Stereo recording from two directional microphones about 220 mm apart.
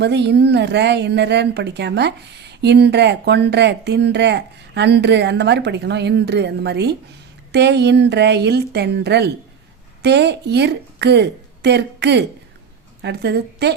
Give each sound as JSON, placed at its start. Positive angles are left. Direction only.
{"t": 0.0, "sound": "a woman's voice", "side_deg": -50}